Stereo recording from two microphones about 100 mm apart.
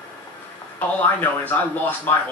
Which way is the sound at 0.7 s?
15° left (ahead or behind).